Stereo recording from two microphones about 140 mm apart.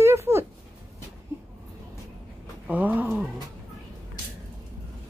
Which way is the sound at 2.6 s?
10° right (ahead or behind).